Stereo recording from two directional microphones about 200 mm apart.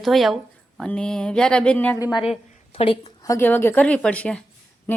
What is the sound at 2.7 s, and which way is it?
Speech, 30° left (ahead or behind).